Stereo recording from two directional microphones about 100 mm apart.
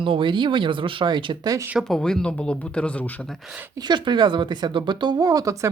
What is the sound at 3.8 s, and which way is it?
Speech, 50° right (ahead or behind).